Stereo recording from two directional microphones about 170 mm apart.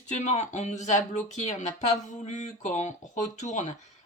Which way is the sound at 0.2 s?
45° left (ahead or behind).